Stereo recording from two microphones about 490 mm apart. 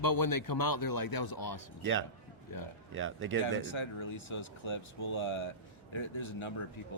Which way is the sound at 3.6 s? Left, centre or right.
Left.